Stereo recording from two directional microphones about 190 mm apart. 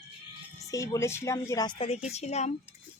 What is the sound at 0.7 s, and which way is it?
Speech, 15° left (ahead or behind).